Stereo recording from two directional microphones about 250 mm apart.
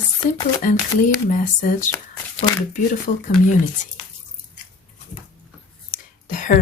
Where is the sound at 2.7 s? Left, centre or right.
Left.